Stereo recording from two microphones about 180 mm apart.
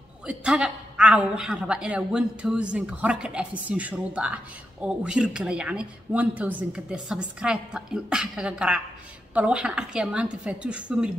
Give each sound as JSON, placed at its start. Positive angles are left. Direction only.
{"t": 0.3, "sound": "a woman's voice", "side_deg": -5}